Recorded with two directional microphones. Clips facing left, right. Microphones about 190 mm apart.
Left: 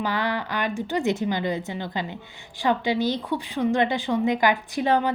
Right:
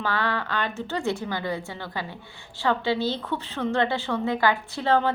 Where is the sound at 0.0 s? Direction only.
15° left (ahead or behind).